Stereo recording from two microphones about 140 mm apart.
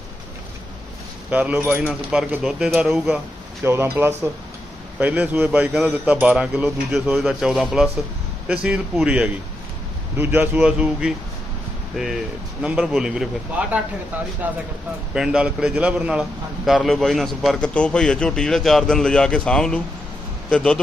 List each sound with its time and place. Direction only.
1.3 s a man's voice: 10° right (ahead or behind)
3.6 s a man's voice: 15° right (ahead or behind); by 20.8 s 5° left (ahead or behind)